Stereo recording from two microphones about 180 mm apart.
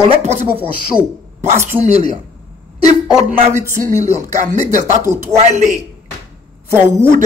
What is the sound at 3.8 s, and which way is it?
Speech, 40° right (ahead or behind).